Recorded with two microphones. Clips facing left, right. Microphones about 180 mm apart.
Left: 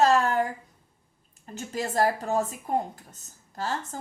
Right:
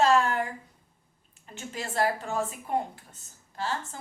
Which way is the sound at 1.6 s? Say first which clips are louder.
Left 3 dB; 40° left (ahead or behind).